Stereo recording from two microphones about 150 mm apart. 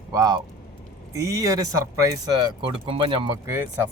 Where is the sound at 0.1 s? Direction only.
25° right (ahead or behind).